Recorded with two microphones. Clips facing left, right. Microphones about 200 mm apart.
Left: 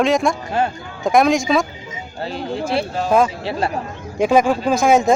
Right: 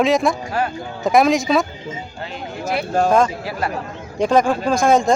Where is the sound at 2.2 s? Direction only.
35° left (ahead or behind).